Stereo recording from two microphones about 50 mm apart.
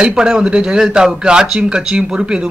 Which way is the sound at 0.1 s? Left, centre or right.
Centre.